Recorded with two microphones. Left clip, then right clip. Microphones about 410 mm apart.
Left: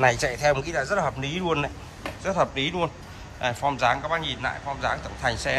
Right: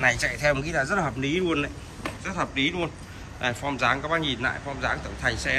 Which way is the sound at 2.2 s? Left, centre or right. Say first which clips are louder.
Left 3 dB; centre.